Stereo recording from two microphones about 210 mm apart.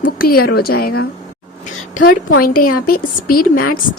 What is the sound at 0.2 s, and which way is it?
Speech, 45° left (ahead or behind).